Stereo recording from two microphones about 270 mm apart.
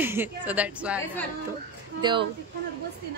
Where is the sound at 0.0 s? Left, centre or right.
Centre.